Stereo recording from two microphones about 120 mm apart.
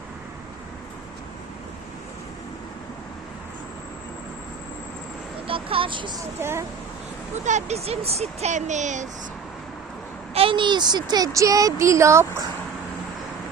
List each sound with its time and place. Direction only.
5.5 s speech: 50° right (ahead or behind)
6.4 s speech: 20° right (ahead or behind)
7.4 s speech: 70° right (ahead or behind); by 9.0 s 90° right
10.3 s speech: 50° right (ahead or behind); by 12.2 s 25° right (ahead or behind)